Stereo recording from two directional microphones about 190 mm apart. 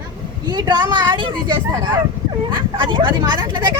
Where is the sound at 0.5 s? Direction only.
25° right (ahead or behind).